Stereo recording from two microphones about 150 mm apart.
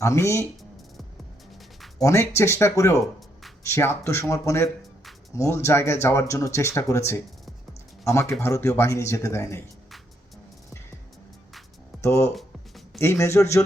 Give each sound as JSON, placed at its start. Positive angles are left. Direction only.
{"t": 0.0, "sound": "speech", "side_deg": 20}
{"t": 2.0, "sound": "speech", "side_deg": 20}
{"t": 12.0, "sound": "speech", "side_deg": 20}
{"t": 12.3, "sound": "music", "side_deg": 0}
{"t": 13.0, "sound": "speech", "side_deg": 15}